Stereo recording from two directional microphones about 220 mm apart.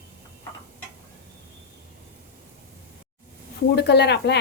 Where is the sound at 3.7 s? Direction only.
50° left (ahead or behind).